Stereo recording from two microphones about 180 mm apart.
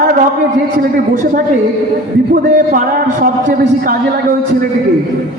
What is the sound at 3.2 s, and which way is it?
Speech, 50° right (ahead or behind).